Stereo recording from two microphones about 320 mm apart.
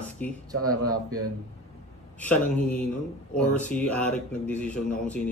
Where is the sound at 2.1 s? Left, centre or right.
Centre.